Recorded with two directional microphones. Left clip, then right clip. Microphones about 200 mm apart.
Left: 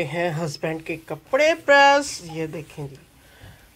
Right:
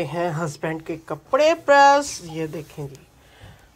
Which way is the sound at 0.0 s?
Centre (ahead or behind).